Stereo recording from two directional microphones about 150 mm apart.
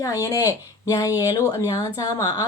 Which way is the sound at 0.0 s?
25° left (ahead or behind).